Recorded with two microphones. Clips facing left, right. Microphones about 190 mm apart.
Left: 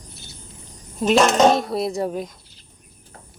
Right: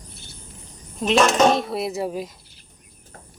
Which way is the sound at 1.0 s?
5° left (ahead or behind).